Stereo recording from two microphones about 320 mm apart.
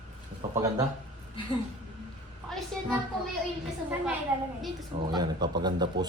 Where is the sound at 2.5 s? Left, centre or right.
Centre.